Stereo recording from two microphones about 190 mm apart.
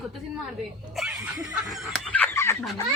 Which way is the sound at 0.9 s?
Centre (ahead or behind).